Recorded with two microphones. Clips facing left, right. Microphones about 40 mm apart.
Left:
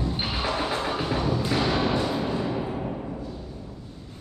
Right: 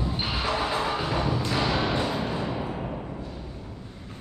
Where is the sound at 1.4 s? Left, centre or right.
Centre.